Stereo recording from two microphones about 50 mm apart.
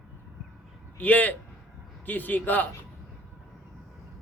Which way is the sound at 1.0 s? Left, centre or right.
Left.